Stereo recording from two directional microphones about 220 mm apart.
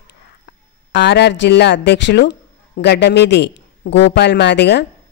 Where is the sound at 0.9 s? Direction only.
50° left (ahead or behind).